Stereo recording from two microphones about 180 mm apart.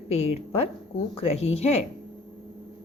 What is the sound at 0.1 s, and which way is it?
A woman's voice, 35° left (ahead or behind).